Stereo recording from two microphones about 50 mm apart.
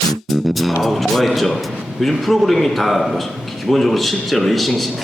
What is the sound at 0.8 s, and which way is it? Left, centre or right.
A man's voice, centre.